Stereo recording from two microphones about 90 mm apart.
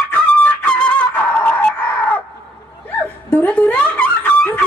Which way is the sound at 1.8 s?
20° left (ahead or behind).